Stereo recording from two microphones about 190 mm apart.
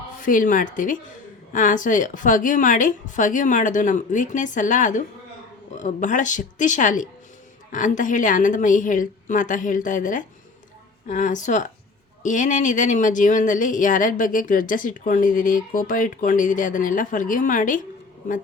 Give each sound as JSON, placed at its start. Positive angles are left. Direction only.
{"t": 0.2, "sound": "speech", "side_deg": 45}